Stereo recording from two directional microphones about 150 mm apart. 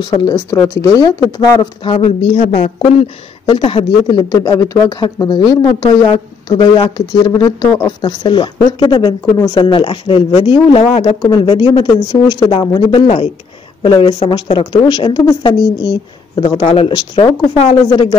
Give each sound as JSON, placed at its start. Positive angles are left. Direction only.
{"t": 0.0, "sound": "speech", "side_deg": 30}
{"t": 3.4, "sound": "speech", "side_deg": 40}
{"t": 11.2, "sound": "speech", "side_deg": 30}